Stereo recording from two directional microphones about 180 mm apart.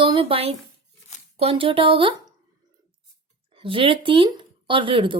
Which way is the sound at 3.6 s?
30° right (ahead or behind).